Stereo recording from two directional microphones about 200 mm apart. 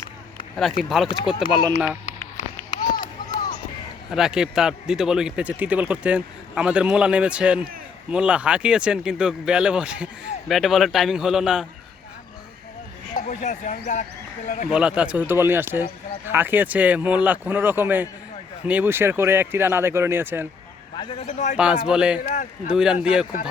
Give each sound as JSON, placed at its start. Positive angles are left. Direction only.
{"t": 0.8, "sound": "a man's voice", "side_deg": 0}
{"t": 1.0, "sound": "a man's voice", "side_deg": 25}
{"t": 3.0, "sound": "a sound", "side_deg": 20}
{"t": 4.1, "sound": "a man's voice", "side_deg": -5}
{"t": 13.1, "sound": "speech", "side_deg": 35}
{"t": 14.7, "sound": "a man's voice", "side_deg": -5}
{"t": 20.9, "sound": "a man's voice", "side_deg": 25}
{"t": 21.5, "sound": "a man's voice", "side_deg": -5}
{"t": 22.2, "sound": "speech", "side_deg": 40}
{"t": 22.7, "sound": "a man's voice", "side_deg": -5}